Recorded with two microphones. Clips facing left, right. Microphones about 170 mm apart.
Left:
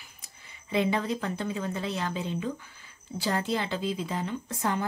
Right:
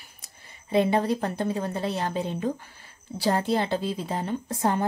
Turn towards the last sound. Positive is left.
turn(degrees=-40)  # may be behind; listen again after turning